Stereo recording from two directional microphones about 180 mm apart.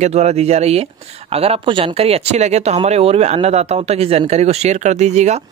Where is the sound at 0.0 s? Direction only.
35° right (ahead or behind).